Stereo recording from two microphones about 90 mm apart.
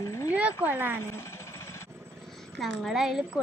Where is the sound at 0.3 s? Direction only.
15° right (ahead or behind).